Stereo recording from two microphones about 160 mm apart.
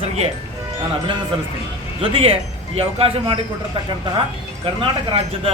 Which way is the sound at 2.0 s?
35° right (ahead or behind).